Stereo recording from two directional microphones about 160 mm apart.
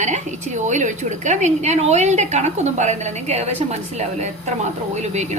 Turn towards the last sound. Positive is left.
turn(degrees=-45)  # may be behind; listen again after turning